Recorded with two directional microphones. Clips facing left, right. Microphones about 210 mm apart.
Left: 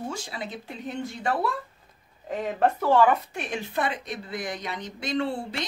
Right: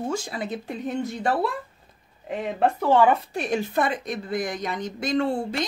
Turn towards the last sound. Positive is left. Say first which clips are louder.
# right 4 dB
turn(degrees=-45)  # may be behind; listen again after turning